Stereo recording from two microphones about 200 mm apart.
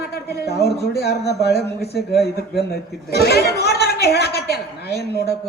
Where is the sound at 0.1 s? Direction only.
55° left (ahead or behind).